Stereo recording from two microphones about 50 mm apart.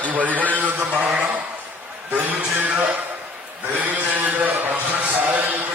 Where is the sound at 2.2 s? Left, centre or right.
Right.